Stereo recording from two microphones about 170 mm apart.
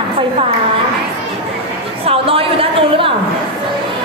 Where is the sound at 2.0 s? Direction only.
35° right (ahead or behind).